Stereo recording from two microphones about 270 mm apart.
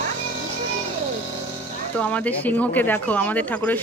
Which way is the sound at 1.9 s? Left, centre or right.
Centre.